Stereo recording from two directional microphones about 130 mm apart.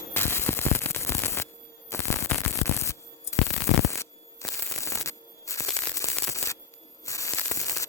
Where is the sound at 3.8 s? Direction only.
25° left (ahead or behind).